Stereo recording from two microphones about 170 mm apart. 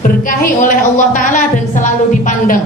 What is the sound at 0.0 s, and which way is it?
Speech, 50° left (ahead or behind).